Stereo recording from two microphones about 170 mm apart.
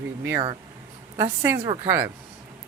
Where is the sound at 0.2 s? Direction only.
10° right (ahead or behind).